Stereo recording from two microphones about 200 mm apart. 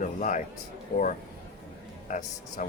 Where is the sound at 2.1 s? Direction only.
40° left (ahead or behind).